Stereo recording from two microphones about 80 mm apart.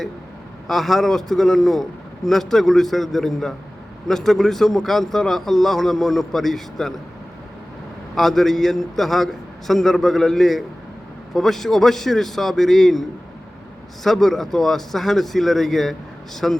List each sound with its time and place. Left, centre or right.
0.7 s a man's voice: centre
8.1 s a man's voice: centre